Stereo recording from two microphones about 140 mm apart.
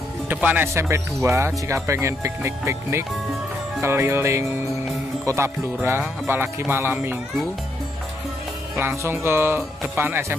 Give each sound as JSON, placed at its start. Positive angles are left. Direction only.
{"t": 0.3, "sound": "speech", "side_deg": -10}
{"t": 8.7, "sound": "speech", "side_deg": -15}